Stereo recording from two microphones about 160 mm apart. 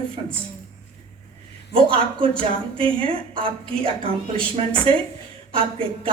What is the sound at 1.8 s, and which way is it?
A woman's voice, 35° right (ahead or behind).